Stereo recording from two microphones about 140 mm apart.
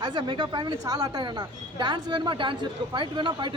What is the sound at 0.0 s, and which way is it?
A woman's voice, 30° right (ahead or behind).